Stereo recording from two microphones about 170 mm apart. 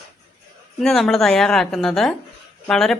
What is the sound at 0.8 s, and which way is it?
A woman's voice, centre (ahead or behind).